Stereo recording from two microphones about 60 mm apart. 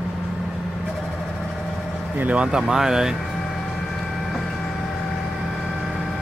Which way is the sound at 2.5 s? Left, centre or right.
Centre.